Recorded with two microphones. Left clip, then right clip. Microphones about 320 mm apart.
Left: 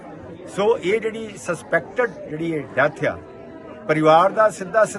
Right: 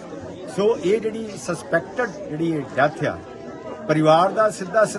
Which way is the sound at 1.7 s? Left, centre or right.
Centre.